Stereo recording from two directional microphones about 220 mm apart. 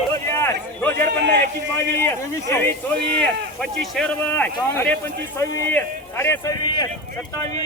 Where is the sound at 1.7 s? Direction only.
10° left (ahead or behind).